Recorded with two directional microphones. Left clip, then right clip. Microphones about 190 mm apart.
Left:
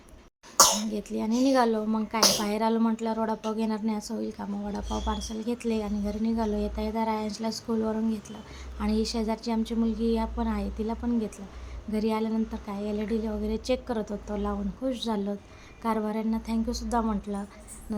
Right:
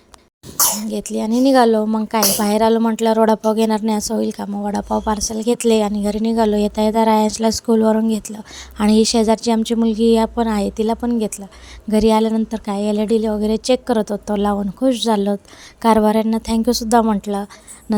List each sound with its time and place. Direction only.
0.5 s speech: 40° right (ahead or behind)